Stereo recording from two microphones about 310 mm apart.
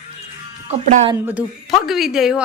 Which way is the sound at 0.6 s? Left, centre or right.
Centre.